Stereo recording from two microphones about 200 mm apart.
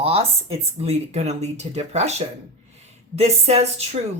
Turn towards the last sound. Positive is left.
turn(degrees=-30)  # may be behind; listen again after turning